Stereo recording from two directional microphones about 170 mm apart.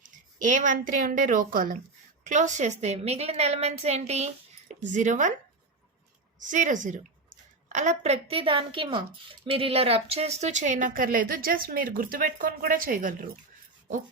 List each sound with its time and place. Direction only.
0.0 s a woman's voice: 50° right (ahead or behind)
6.4 s a woman's voice: 45° right (ahead or behind)